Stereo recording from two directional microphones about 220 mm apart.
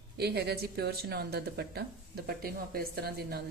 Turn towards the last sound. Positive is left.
turn(degrees=-45)  # may be behind; listen again after turning